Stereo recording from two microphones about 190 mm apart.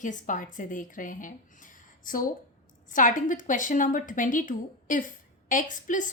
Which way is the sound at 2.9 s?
45° left (ahead or behind).